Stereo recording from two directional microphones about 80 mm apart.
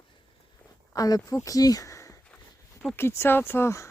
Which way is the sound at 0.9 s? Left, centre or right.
Left.